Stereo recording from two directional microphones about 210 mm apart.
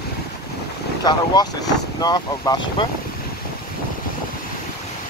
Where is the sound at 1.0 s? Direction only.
20° left (ahead or behind).